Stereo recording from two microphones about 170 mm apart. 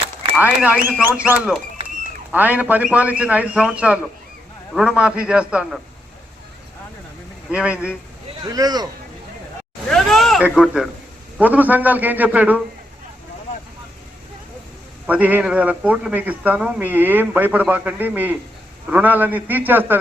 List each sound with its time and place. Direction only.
0.3 s a man's voice: 10° right (ahead or behind)
7.5 s a man's voice: 5° right (ahead or behind)
8.4 s speech: 20° right (ahead or behind)
9.9 s a man's voice: centre (ahead or behind)
15.0 s a man's voice: 10° right (ahead or behind)